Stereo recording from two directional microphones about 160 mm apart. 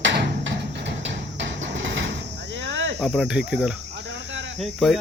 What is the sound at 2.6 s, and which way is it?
Cricket, 90° right.